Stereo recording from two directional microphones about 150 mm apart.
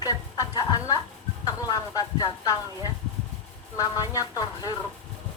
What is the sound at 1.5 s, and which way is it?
Speech, 25° left (ahead or behind).